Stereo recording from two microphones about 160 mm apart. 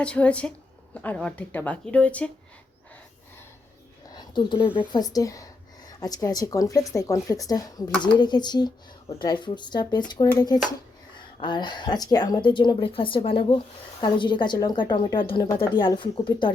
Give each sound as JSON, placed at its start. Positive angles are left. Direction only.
{"t": 0.0, "sound": "speech", "side_deg": 5}
{"t": 4.1, "sound": "speech", "side_deg": 25}